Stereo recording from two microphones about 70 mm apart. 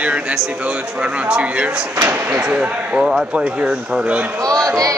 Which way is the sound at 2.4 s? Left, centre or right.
Centre.